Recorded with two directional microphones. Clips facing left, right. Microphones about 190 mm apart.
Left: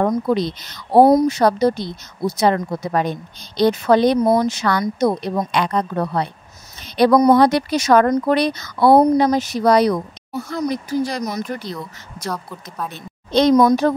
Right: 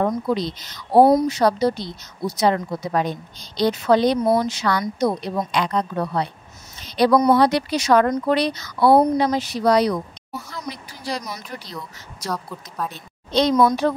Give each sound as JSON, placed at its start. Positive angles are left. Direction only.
{"t": 0.0, "sound": "speech", "side_deg": 55}
{"t": 1.0, "sound": "speech", "side_deg": 45}
{"t": 4.2, "sound": "speech", "side_deg": 40}
{"t": 6.8, "sound": "a sound", "side_deg": 55}
{"t": 7.2, "sound": "speech", "side_deg": 45}
{"t": 12.3, "sound": "speech", "side_deg": 0}
{"t": 12.9, "sound": "a woman's voice", "side_deg": 50}